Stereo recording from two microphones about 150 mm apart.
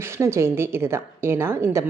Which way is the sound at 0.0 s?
15° right (ahead or behind).